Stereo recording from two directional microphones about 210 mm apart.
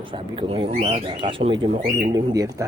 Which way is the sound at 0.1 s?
25° right (ahead or behind).